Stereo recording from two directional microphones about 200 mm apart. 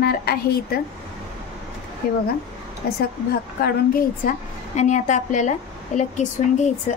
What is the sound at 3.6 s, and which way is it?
A woman's voice, 45° left (ahead or behind).